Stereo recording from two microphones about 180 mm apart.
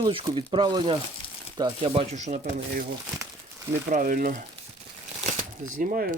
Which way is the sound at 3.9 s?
50° right (ahead or behind).